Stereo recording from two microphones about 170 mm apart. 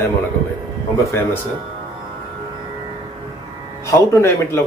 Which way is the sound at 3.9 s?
15° left (ahead or behind).